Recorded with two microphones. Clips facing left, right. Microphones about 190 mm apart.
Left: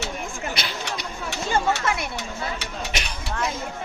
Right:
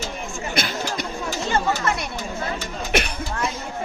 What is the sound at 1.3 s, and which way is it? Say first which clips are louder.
Chatter: even; 70° left (ahead or behind).